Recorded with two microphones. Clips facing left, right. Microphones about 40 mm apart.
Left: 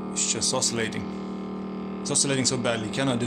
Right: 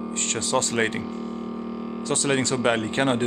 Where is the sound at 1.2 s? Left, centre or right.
Centre.